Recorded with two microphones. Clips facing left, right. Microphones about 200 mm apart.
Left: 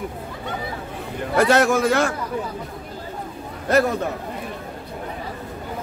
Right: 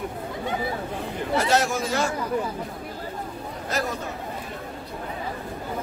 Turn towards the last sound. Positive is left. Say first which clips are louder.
# left 10 dB
turn(degrees=60)  # may be behind; listen again after turning